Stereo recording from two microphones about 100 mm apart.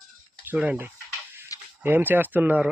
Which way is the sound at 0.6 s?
15° right (ahead or behind).